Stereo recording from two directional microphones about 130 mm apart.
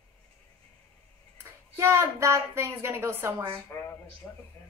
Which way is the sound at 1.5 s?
20° right (ahead or behind).